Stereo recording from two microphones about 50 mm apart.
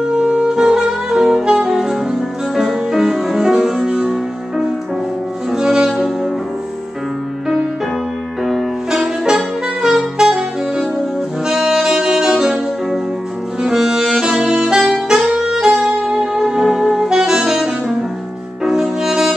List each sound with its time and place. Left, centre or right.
0.2 s saxophone: centre
2.5 s music: centre
5.6 s music: centre
8.9 s saxophone: centre
11.4 s saxophone: centre
15.7 s music: centre
16.4 s saxophone: centre
18.6 s music: centre